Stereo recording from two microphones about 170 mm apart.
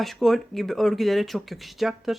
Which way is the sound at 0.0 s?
Centre (ahead or behind).